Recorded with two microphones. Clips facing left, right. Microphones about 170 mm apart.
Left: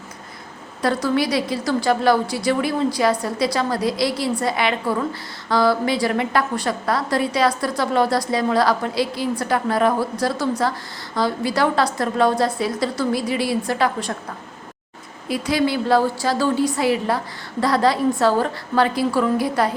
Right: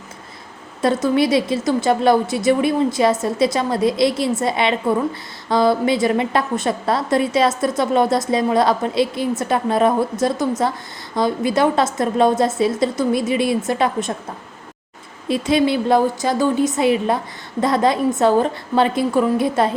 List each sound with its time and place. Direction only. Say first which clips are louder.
0.8 s a woman's voice: right 3 dB; 20° right (ahead or behind)
15.3 s a woman's voice: right 3 dB; 25° right (ahead or behind)